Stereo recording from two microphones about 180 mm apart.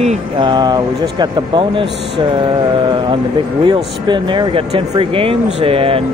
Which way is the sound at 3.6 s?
25° right (ahead or behind).